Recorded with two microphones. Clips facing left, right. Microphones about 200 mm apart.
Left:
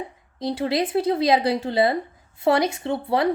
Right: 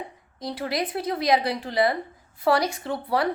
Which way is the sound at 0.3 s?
25° left (ahead or behind).